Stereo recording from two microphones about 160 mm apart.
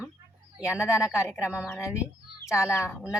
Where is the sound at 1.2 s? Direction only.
15° left (ahead or behind).